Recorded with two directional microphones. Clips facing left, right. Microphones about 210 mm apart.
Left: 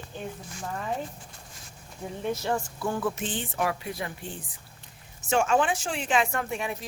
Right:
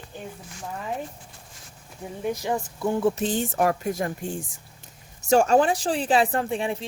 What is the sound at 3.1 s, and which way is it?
Speech, 40° right (ahead or behind).